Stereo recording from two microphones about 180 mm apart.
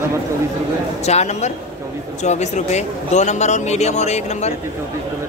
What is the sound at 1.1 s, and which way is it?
A man's voice, 40° left (ahead or behind).